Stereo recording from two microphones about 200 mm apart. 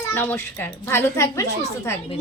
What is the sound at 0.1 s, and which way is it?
Speech, 10° left (ahead or behind).